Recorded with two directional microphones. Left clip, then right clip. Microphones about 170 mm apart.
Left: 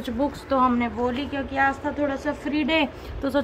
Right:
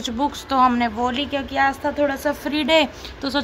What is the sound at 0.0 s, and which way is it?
Speech, 60° right (ahead or behind).